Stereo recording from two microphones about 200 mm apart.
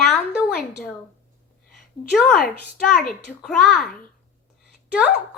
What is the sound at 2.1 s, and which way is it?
Speech, centre (ahead or behind).